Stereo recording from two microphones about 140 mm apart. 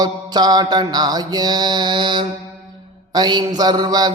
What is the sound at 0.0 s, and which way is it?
Mantra, 30° right (ahead or behind).